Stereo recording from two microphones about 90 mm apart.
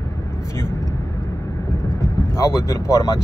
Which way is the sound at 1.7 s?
30° left (ahead or behind).